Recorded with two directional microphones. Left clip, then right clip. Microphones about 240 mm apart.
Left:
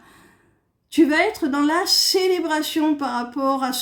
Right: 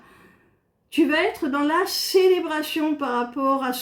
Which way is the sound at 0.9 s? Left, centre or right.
Left.